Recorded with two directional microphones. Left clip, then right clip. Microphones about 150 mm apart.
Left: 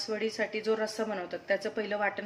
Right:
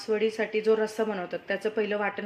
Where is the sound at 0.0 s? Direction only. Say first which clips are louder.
Right 5 dB; 40° right (ahead or behind).